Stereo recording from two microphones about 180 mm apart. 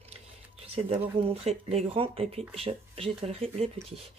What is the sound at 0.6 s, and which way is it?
Speech, 35° right (ahead or behind).